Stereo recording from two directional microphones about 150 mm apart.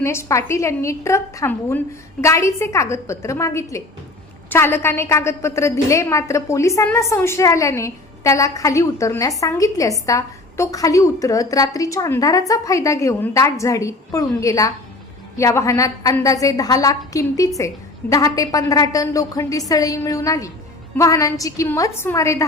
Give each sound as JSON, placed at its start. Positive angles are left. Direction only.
{"t": 0.0, "sound": "a woman's voice", "side_deg": 20}